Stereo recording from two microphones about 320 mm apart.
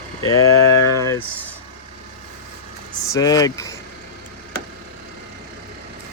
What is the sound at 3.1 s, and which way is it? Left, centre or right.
Speech, centre.